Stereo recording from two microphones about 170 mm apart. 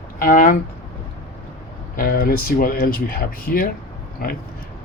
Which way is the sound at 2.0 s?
55° left (ahead or behind).